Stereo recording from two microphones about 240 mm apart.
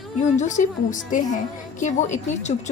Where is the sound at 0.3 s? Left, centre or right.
Left.